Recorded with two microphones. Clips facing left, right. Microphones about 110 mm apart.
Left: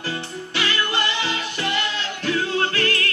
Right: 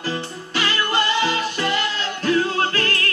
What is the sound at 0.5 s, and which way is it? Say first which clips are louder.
Music: right 3 dB; 45° right (ahead or behind).